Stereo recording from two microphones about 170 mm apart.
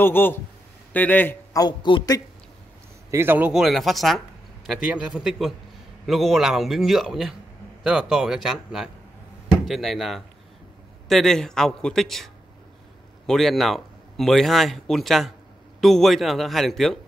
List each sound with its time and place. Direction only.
0.0 s a man's voice: 10° left (ahead or behind)
1.6 s a man's voice: 25° left (ahead or behind)
3.1 s speech: 15° right (ahead or behind)
13.3 s speech: centre (ahead or behind)